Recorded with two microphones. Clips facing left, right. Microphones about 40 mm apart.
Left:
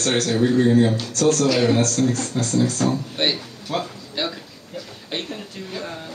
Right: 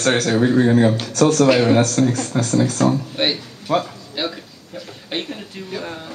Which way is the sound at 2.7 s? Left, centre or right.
Centre.